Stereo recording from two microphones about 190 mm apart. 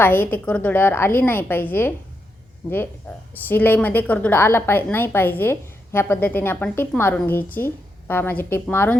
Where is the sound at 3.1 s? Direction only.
10° left (ahead or behind).